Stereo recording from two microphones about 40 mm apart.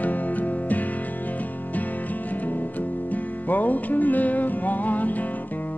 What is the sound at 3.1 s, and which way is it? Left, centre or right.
Music, left.